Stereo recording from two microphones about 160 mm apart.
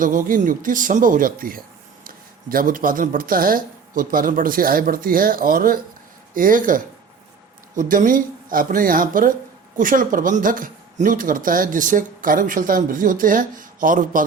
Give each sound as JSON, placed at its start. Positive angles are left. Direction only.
{"t": 0.0, "sound": "speech", "side_deg": -55}